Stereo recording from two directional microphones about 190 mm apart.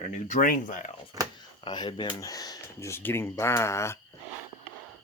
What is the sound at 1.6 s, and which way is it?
Speech, 25° left (ahead or behind).